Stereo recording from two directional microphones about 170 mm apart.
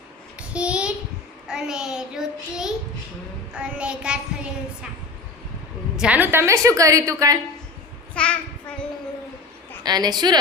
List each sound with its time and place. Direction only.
0.3 s child singing: 5° right (ahead or behind)
3.5 s a woman's voice: 5° right (ahead or behind)
6.0 s a woman's voice: 10° right (ahead or behind)
8.1 s a child's voice: 5° left (ahead or behind)
9.8 s a woman's voice: 25° right (ahead or behind)